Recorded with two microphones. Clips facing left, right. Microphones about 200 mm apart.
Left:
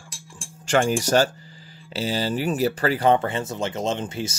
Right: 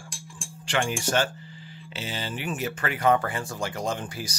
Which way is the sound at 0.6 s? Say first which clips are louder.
Left 7 dB; 40° left (ahead or behind).